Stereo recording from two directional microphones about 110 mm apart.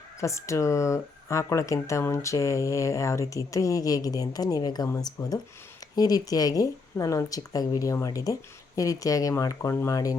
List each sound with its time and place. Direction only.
0.2 s speech: 25° left (ahead or behind)